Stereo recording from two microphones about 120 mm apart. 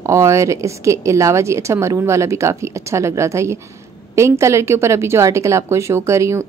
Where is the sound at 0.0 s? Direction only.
25° right (ahead or behind).